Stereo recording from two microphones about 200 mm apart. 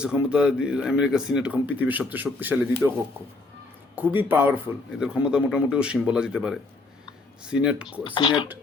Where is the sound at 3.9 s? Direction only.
10° right (ahead or behind).